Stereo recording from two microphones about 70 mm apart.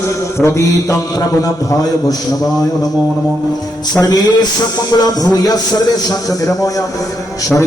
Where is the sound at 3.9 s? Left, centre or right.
Left.